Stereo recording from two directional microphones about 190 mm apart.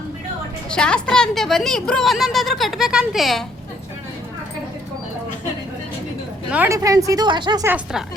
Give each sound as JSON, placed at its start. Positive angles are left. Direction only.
{"t": 0.7, "sound": "a woman's voice", "side_deg": 5}
{"t": 6.5, "sound": "speech", "side_deg": -10}